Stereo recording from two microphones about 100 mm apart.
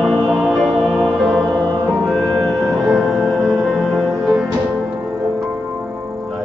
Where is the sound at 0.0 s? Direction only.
Centre (ahead or behind).